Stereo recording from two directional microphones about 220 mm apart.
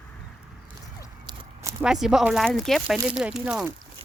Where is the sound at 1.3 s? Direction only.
20° right (ahead or behind).